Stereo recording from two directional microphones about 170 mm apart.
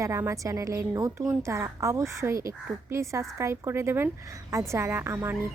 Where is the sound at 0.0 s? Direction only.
15° right (ahead or behind).